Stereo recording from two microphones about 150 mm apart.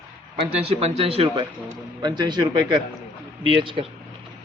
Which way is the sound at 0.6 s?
45° right (ahead or behind).